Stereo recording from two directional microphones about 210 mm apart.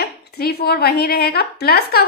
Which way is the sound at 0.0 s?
50° left (ahead or behind).